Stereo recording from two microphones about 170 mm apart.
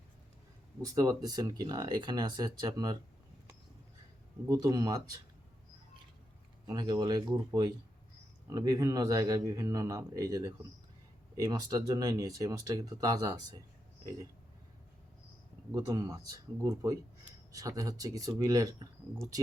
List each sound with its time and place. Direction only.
0.8 s speech: 20° right (ahead or behind)
4.4 s speech: 20° right (ahead or behind)
6.7 s speech: 25° right (ahead or behind)
15.7 s speech: 20° right (ahead or behind)